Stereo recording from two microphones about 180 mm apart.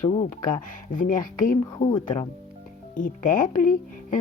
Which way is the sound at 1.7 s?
25° left (ahead or behind).